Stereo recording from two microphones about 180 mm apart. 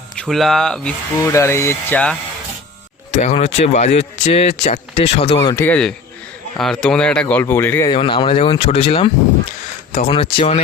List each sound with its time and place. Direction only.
0.2 s speech: centre (ahead or behind)
1.2 s speech: 15° left (ahead or behind)
3.1 s speech: 40° left (ahead or behind)
5.4 s speech: 15° left (ahead or behind)
7.9 s speech: 30° left (ahead or behind)